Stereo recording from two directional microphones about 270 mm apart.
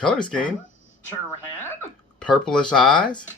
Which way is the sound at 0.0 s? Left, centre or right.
Centre.